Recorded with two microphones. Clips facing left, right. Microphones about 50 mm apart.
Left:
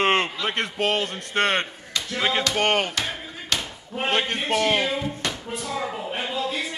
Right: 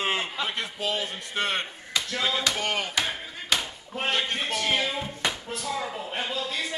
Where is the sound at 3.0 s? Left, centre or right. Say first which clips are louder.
Even; centre.